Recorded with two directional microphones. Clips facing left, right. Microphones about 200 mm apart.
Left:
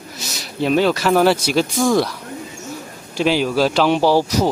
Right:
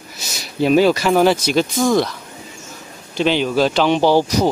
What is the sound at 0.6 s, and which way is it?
Speech, 5° right (ahead or behind).